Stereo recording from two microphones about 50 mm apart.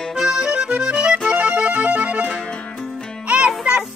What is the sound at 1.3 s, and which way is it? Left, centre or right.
Music, right.